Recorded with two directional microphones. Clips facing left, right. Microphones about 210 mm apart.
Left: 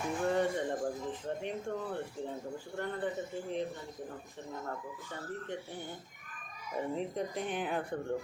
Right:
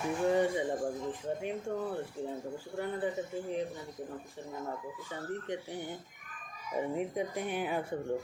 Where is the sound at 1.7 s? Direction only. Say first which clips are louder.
Right 2 dB; 10° right (ahead or behind).